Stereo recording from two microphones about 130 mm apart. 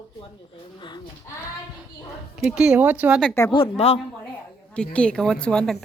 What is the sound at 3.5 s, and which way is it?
Speech, 50° left (ahead or behind).